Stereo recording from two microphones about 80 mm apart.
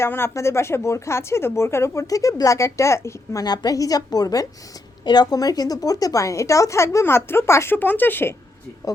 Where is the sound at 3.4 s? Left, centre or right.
Left.